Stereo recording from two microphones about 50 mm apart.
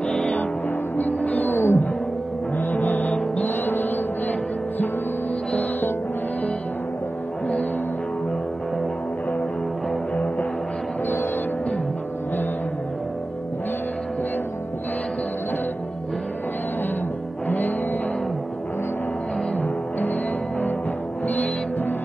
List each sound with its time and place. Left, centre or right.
0.9 s music: left
3.1 s music: left
3.4 s music: left
17.5 s music: left
19.5 s music: left
21.3 s music: left